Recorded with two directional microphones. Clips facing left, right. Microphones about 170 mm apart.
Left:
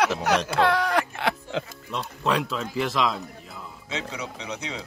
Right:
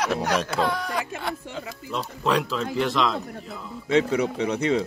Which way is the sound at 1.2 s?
80° left.